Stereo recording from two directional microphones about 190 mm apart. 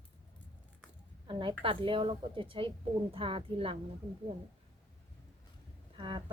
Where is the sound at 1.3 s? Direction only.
25° right (ahead or behind).